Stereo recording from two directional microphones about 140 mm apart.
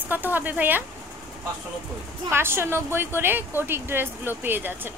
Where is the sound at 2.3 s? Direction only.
15° right (ahead or behind).